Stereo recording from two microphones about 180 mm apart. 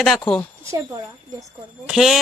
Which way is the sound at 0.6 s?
20° right (ahead or behind).